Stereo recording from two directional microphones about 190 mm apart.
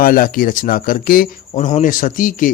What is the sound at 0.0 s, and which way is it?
Speech, 50° left (ahead or behind).